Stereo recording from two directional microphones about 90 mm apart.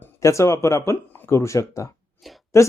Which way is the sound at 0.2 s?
35° left (ahead or behind).